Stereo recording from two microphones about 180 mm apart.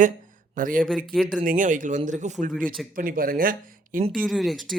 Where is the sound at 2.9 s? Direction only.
50° right (ahead or behind).